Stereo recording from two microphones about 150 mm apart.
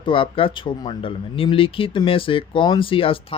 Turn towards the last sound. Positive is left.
turn(degrees=35)  # may be behind; listen again after turning